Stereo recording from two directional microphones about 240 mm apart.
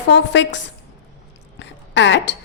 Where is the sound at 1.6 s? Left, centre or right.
Left.